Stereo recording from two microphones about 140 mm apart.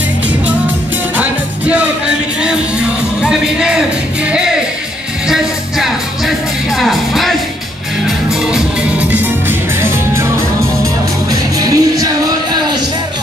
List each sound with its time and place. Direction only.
1.7 s music: 10° right (ahead or behind)
5.3 s music: centre (ahead or behind)
9.1 s music: 15° right (ahead or behind)
11.6 s music: 25° right (ahead or behind)